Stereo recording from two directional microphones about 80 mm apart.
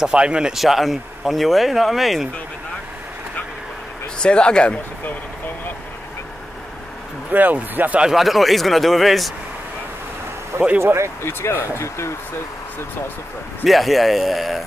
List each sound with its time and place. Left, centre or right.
0.0 s speech: centre
4.2 s speech: centre
7.3 s speech: right
8.1 s speech: centre
10.8 s speech: right
11.2 s speech: left
13.7 s speech: centre